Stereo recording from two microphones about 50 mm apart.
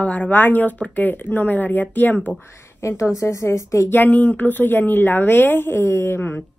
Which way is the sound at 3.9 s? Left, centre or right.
Left.